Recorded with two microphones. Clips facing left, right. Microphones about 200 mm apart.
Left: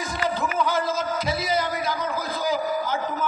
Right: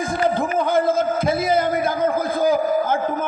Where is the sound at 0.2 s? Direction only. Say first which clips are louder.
Right 4 dB; 55° right (ahead or behind).